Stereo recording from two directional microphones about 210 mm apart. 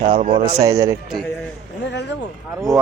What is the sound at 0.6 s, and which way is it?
Speech, 15° right (ahead or behind).